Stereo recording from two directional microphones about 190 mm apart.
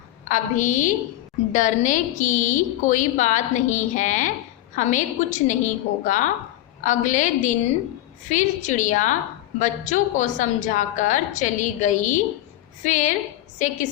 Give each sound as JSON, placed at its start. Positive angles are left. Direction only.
{"t": 0.3, "sound": "a woman's voice", "side_deg": 40}